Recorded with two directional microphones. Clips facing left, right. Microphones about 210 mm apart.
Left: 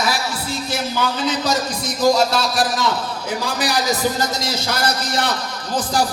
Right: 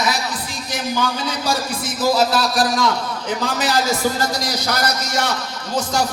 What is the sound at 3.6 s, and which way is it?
A man's voice, 15° left (ahead or behind).